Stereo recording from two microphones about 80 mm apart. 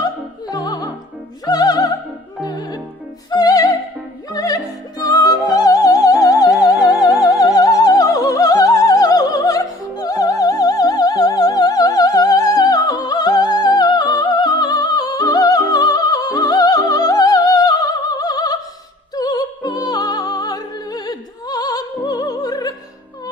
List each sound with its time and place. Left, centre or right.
0.0 s opera: left
1.5 s music: left